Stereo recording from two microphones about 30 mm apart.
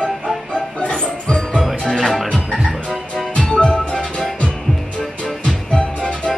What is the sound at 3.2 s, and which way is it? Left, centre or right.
Music, left.